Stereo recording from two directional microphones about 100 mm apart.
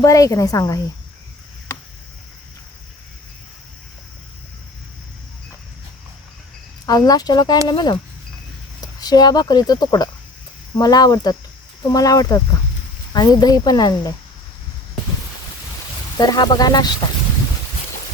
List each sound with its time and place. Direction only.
0.0 s speech: 35° left (ahead or behind)
6.8 s speech: 40° left (ahead or behind)
9.0 s speech: 45° left (ahead or behind)
16.1 s speech: 45° left (ahead or behind)